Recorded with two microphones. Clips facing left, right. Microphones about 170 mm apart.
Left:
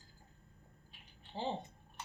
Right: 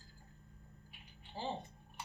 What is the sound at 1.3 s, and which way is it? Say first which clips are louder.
Speech: left 3 dB; 25° left (ahead or behind).